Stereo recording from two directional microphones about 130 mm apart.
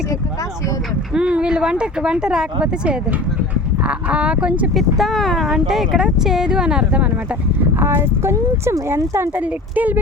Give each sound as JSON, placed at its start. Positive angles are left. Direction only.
{"t": 1.1, "sound": "speech", "side_deg": -10}
{"t": 7.8, "sound": "speech", "side_deg": -20}